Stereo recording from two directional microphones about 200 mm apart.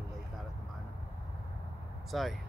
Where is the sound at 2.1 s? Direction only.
Centre (ahead or behind).